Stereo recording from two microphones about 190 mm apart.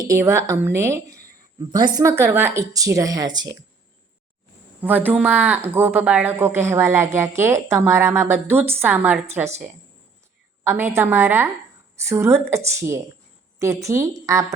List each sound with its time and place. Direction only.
0.1 s speech: 15° right (ahead or behind)
4.8 s speech: 10° right (ahead or behind)